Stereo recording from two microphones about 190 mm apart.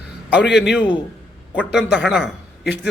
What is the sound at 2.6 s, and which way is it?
Speech, 65° left (ahead or behind).